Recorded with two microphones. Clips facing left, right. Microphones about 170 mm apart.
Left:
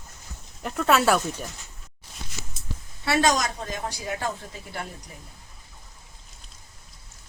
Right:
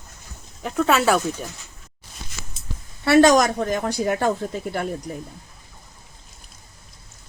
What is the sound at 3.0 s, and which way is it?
Speech, 55° right (ahead or behind).